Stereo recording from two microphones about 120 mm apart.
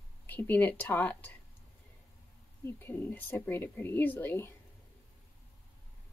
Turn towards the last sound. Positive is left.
turn(degrees=20)  # may be behind; listen again after turning